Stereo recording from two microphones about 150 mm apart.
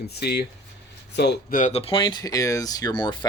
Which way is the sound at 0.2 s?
90° left.